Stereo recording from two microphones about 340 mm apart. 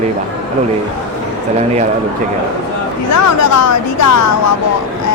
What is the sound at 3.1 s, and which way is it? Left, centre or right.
Speech, left.